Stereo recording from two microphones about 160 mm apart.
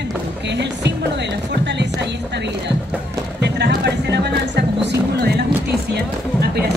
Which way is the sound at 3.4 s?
90° right.